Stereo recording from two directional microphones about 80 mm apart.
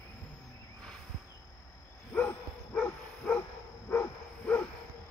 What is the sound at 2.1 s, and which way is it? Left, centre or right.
Dog, centre.